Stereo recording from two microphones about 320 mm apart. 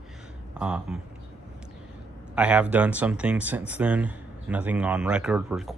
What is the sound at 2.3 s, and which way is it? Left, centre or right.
Speech, centre.